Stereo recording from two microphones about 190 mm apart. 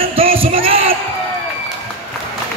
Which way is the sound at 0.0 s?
30° right (ahead or behind).